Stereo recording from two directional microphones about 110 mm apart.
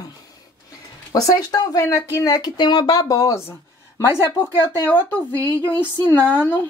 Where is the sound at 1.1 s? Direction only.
35° left (ahead or behind); by 5.2 s 15° left (ahead or behind).